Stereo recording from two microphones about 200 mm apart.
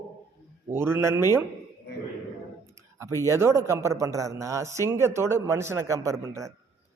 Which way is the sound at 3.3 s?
15° right (ahead or behind).